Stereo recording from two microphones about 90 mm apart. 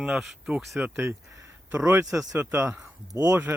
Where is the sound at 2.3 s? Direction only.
25° right (ahead or behind).